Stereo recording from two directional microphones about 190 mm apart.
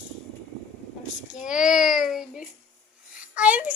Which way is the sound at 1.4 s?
5° right (ahead or behind).